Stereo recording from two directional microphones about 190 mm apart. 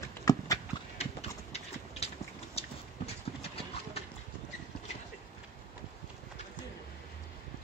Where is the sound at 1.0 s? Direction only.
35° left (ahead or behind).